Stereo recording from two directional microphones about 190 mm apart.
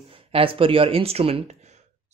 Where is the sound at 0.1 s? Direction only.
30° right (ahead or behind).